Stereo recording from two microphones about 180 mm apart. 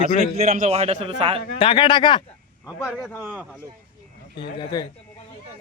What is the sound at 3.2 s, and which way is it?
Speech, centre (ahead or behind).